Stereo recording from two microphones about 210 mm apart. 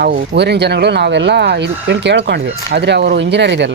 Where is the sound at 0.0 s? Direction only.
55° right (ahead or behind).